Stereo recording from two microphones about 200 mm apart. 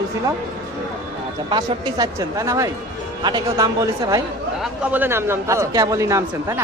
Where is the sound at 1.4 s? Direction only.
20° right (ahead or behind).